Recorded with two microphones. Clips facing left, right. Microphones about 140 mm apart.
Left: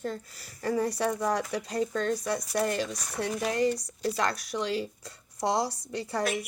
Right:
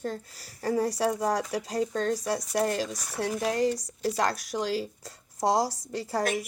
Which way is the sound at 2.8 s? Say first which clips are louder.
Even; 5° right (ahead or behind).